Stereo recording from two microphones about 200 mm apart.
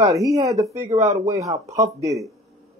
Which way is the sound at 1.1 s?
15° right (ahead or behind).